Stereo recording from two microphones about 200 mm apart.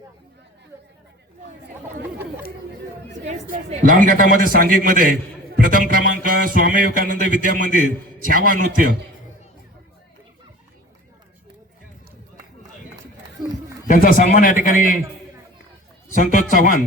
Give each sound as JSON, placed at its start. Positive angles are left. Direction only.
{"t": 3.2, "sound": "a man's voice", "side_deg": -35}
{"t": 13.8, "sound": "a man's voice", "side_deg": 45}
{"t": 16.1, "sound": "a man's voice", "side_deg": 40}